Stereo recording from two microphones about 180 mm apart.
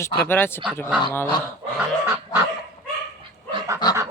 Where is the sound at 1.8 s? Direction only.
10° right (ahead or behind).